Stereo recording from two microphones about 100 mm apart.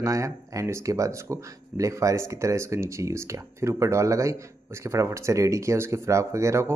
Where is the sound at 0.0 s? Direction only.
35° right (ahead or behind).